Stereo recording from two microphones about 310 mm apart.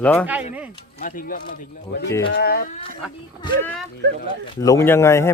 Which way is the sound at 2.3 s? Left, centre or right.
Left.